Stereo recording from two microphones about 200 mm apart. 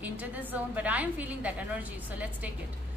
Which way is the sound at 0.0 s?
10° right (ahead or behind).